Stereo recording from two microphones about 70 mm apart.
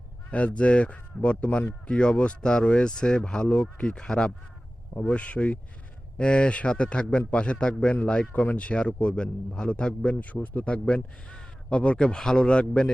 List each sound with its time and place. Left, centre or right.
0.3 s speech: centre